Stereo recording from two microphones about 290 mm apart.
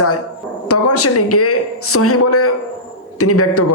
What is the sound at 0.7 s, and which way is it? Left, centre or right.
A man's voice, left.